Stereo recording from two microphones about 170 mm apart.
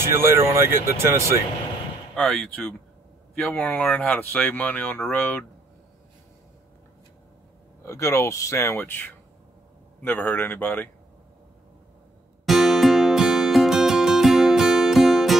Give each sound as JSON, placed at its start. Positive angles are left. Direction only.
{"t": 0.1, "sound": "speech", "side_deg": -15}
{"t": 2.1, "sound": "speech", "side_deg": 5}
{"t": 7.8, "sound": "speech", "side_deg": 15}
{"t": 10.0, "sound": "speech", "side_deg": 10}
{"t": 12.4, "sound": "music", "side_deg": 0}